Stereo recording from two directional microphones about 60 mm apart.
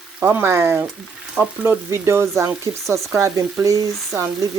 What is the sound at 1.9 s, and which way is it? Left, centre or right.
Speech, right.